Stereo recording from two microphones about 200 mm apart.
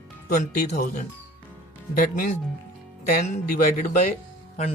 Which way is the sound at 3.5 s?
45° left (ahead or behind).